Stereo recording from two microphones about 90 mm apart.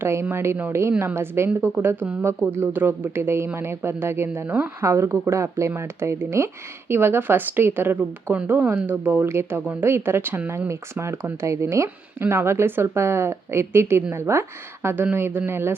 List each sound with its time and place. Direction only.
0.0 s speech: 30° right (ahead or behind)
4.4 s speech: 15° right (ahead or behind)
4.8 s speech: 35° right (ahead or behind)